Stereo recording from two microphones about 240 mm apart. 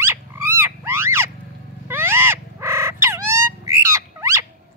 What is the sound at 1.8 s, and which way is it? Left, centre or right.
Owl, centre.